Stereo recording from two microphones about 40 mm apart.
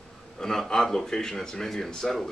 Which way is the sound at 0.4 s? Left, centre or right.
Centre.